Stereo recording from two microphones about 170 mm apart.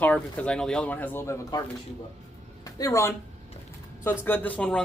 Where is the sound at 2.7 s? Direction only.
20° left (ahead or behind).